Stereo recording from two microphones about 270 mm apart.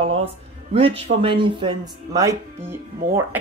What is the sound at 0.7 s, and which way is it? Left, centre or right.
A woman's voice, right.